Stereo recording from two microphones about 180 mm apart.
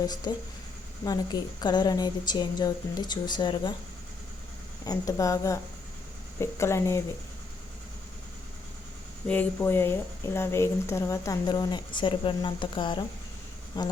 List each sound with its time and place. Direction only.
0.0 s a woman's voice: 20° left (ahead or behind)
4.9 s a woman's voice: 20° left (ahead or behind)
9.2 s a woman's voice: 10° left (ahead or behind); by 13.1 s 25° left (ahead or behind)